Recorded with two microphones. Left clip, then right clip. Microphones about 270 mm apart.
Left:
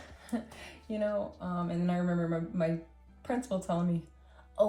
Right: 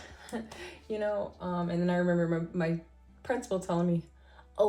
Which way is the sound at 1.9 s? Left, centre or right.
Right.